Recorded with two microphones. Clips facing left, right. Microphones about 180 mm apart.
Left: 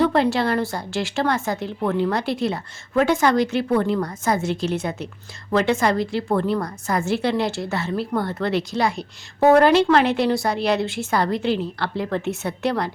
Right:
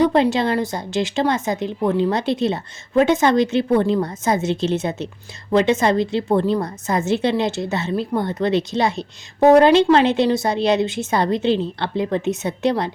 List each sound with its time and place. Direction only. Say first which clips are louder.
0.0 s a woman's voice: right 2 dB; 20° right (ahead or behind)